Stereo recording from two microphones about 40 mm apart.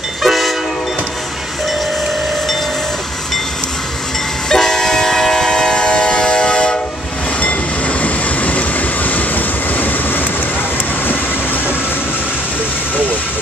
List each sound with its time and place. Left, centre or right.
0.2 s train: centre
4.5 s train: centre
7.4 s train: left